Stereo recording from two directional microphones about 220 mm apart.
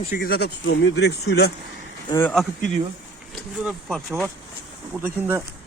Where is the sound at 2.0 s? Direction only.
20° left (ahead or behind).